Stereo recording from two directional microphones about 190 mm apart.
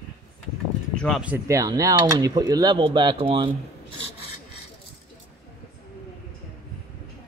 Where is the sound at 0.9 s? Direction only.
5° left (ahead or behind).